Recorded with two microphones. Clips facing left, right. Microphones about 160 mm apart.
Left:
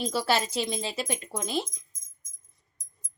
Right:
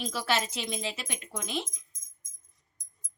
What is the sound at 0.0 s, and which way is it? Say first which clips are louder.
Speech: left 4 dB; 30° left (ahead or behind).